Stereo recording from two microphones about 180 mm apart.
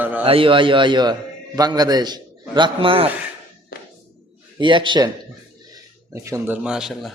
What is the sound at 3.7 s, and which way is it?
Music, 55° left (ahead or behind).